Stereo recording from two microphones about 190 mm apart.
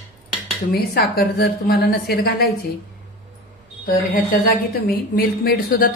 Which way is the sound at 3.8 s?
50° left (ahead or behind).